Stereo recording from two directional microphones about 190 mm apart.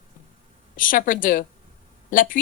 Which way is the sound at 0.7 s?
45° left (ahead or behind).